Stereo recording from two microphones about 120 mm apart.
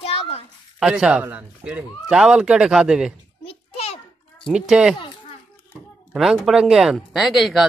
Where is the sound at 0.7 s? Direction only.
5° right (ahead or behind).